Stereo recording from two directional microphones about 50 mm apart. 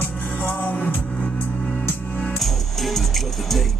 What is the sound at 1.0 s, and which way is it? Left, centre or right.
Music, centre.